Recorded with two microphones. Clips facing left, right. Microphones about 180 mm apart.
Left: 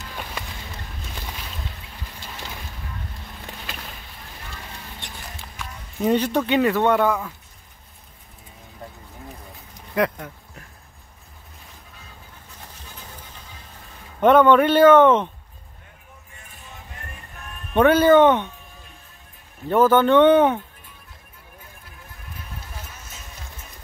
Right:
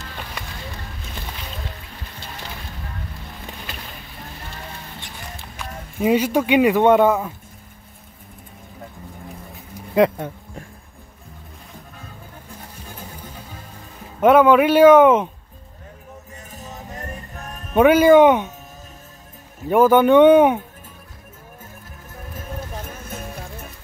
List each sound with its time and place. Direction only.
5.9 s speech: 10° right (ahead or behind); by 7.3 s 25° right (ahead or behind)
9.9 s speech: 25° right (ahead or behind)
12.8 s music: 50° right (ahead or behind)
14.2 s speech: 5° right (ahead or behind)
16.3 s music: 40° right (ahead or behind)
17.7 s speech: 10° right (ahead or behind)
19.7 s speech: 10° right (ahead or behind)
22.3 s music: 45° right (ahead or behind)